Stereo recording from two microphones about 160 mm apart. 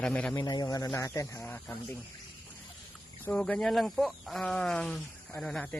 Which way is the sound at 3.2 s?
10° left (ahead or behind).